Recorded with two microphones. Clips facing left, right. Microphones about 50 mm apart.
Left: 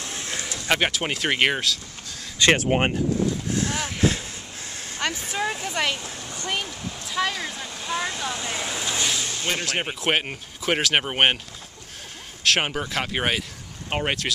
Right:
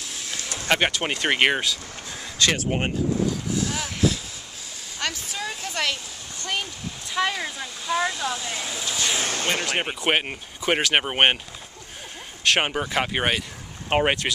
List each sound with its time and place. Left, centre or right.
0.0 s a sound: left
0.7 s speech: centre
2.4 s speech: left
3.5 s speech: left
5.3 s speech: left
6.5 s speech: centre
8.4 s speech: left
9.2 s speech: right
9.7 s speech: centre
12.4 s speech: centre
13.8 s speech: right